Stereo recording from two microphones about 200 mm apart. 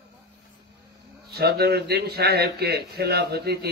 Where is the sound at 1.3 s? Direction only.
50° right (ahead or behind).